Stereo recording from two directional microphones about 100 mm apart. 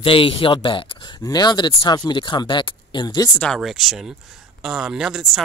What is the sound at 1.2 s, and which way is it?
Speech, 40° left (ahead or behind).